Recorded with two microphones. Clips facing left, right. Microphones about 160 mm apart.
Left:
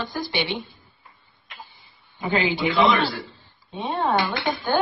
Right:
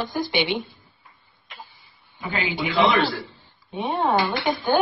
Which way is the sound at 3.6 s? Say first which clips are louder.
Right 1 dB; 20° right (ahead or behind).